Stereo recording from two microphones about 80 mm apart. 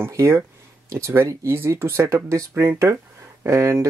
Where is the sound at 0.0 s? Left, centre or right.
Right.